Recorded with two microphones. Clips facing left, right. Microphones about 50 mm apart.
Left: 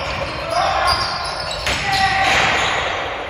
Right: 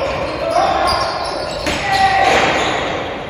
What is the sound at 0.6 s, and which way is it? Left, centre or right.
Basketball bounce, left.